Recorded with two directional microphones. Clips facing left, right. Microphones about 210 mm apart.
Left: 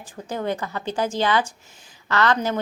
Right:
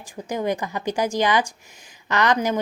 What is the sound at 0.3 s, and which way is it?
A woman's voice, 15° right (ahead or behind).